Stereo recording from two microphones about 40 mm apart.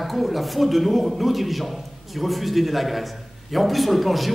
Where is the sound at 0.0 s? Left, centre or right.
Centre.